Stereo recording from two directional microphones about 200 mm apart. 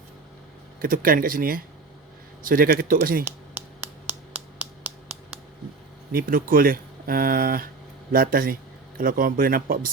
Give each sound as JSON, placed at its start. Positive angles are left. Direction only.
{"t": 0.8, "sound": "speech", "side_deg": -45}
{"t": 3.2, "sound": "a sound", "side_deg": -10}
{"t": 6.1, "sound": "speech", "side_deg": -45}